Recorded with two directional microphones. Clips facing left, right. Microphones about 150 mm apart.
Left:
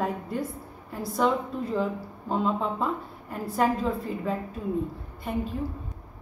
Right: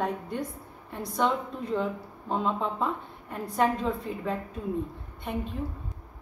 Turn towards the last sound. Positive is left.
turn(degrees=0)  # may be behind; listen again after turning